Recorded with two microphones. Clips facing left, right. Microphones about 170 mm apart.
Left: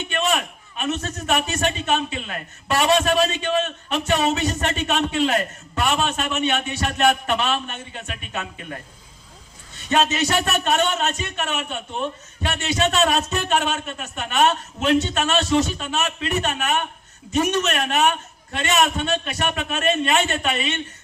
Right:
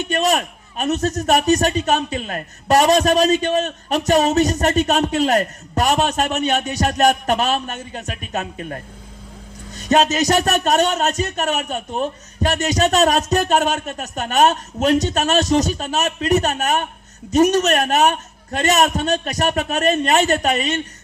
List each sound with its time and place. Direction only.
0.0 s a man's voice: 40° right (ahead or behind)